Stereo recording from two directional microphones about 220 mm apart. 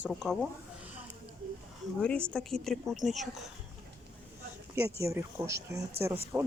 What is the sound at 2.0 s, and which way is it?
Speech, 5° left (ahead or behind).